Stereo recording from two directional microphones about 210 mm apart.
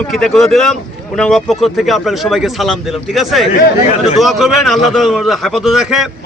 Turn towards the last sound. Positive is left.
turn(degrees=0)  # may be behind; listen again after turning